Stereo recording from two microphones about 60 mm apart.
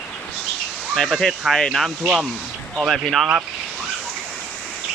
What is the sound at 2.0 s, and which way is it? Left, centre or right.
Speech, centre.